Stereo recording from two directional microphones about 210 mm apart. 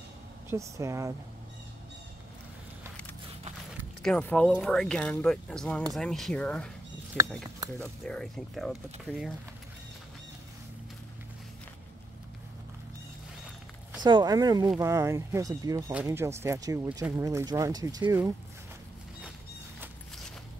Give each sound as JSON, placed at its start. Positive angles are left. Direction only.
{"t": 0.5, "sound": "speech", "side_deg": -15}
{"t": 4.0, "sound": "speech", "side_deg": 5}
{"t": 14.0, "sound": "speech", "side_deg": -20}